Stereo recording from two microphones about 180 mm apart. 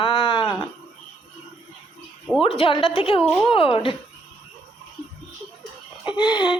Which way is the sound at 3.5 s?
30° left (ahead or behind).